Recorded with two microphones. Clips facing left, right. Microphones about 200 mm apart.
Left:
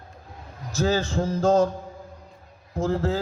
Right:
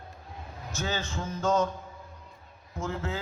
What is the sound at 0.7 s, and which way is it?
Speech, 35° left (ahead or behind).